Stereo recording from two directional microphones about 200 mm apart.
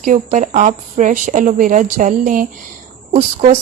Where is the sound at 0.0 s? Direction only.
40° right (ahead or behind).